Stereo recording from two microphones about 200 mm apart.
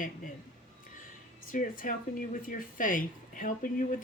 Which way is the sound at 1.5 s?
40° left (ahead or behind).